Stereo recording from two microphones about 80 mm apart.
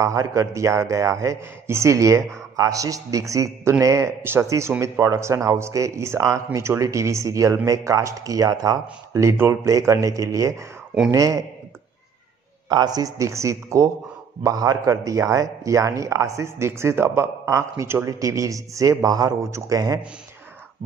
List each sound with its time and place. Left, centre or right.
0.0 s speech: right
12.6 s speech: right